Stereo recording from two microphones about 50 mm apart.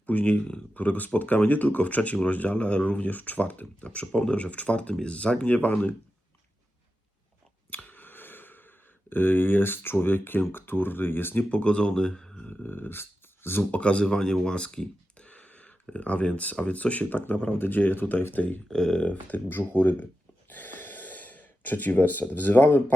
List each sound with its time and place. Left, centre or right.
0.0 s speech: left
7.7 s a sound: left
10.5 s speech: left
11.4 s speech: left
12.6 s speech: left
13.7 s speech: left
15.3 s a sound: left
16.6 s speech: left
18.7 s speech: centre
19.5 s speech: left
20.5 s gasp: left